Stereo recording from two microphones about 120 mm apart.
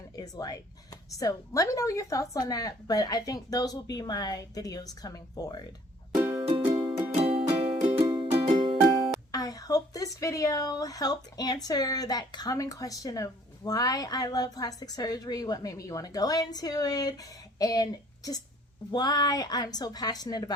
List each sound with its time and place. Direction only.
0.2 s speech: 30° left (ahead or behind)
6.5 s music: 25° right (ahead or behind)
7.1 s music: 60° right (ahead or behind)
7.8 s music: 70° right (ahead or behind)
8.0 s music: 35° right (ahead or behind)
8.3 s music: 50° right (ahead or behind)
9.3 s speech: 30° left (ahead or behind)